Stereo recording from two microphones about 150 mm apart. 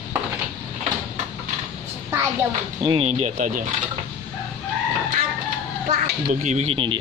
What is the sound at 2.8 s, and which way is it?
Speech, 35° right (ahead or behind).